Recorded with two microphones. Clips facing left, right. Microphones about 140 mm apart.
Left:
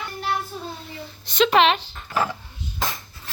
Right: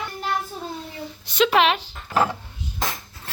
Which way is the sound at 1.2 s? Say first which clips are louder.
Left 1 dB; 10° right (ahead or behind).